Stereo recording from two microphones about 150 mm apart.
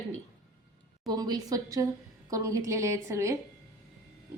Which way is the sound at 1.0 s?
25° right (ahead or behind).